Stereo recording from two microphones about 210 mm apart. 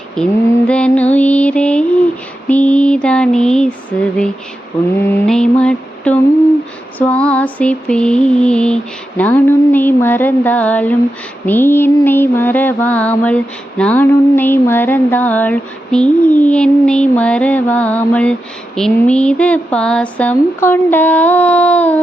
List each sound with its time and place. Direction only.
0.2 s mantra: 5° left (ahead or behind)
0.7 s music: 5° left (ahead or behind)
2.5 s mantra: 5° left (ahead or behind)
4.9 s mantra: 5° left (ahead or behind)